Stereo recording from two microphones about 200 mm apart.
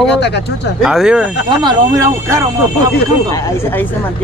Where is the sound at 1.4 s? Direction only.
20° right (ahead or behind).